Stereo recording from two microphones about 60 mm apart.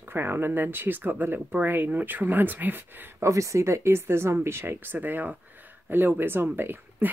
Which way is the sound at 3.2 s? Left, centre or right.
Right.